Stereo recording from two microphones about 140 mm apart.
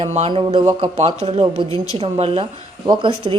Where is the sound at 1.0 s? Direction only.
45° right (ahead or behind).